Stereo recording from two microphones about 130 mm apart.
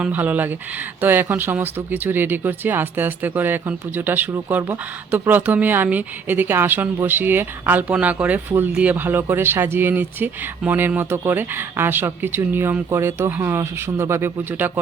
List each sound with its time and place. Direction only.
0.0 s speech: 10° right (ahead or behind)